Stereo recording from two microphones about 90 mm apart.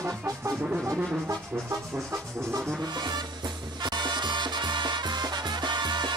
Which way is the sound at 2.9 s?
55° right (ahead or behind).